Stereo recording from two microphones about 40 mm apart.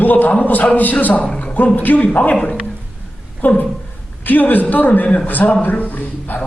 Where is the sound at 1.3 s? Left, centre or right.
Left.